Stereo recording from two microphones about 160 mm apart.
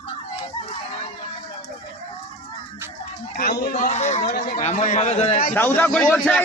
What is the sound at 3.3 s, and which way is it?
Speech, 65° left (ahead or behind).